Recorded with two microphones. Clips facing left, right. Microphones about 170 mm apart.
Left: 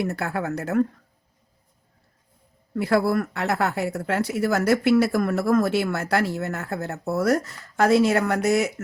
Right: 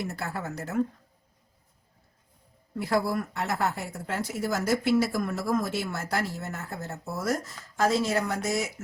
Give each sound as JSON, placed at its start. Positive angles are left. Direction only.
{"t": 0.0, "sound": "speech", "side_deg": 60}
{"t": 2.7, "sound": "speech", "side_deg": 65}